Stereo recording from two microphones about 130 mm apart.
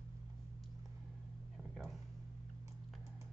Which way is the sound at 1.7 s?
Centre (ahead or behind).